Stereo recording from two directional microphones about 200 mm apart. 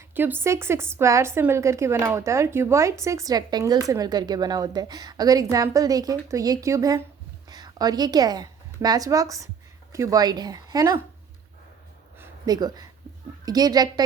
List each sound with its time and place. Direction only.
0.1 s a woman's voice: 10° right (ahead or behind)
12.2 s speech: 20° right (ahead or behind)